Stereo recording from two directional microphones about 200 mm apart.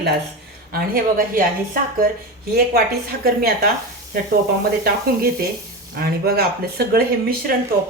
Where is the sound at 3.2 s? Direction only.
50° right (ahead or behind).